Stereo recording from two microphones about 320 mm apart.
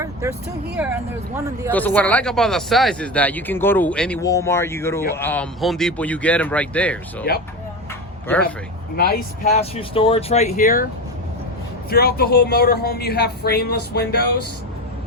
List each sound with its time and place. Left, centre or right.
0.0 s vehicle: centre
1.7 s speech: centre
9.0 s speech: left
11.9 s speech: left